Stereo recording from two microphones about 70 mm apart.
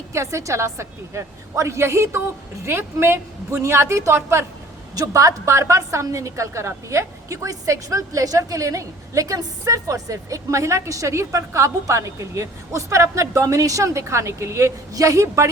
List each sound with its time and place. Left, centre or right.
0.1 s a woman's voice: right
4.9 s a woman's voice: right